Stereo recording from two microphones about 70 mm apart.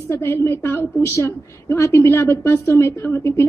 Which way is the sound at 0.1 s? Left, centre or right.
Left.